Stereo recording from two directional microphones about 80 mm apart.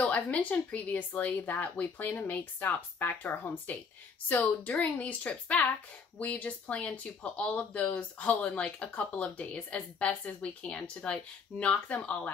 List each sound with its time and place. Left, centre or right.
0.0 s speech: centre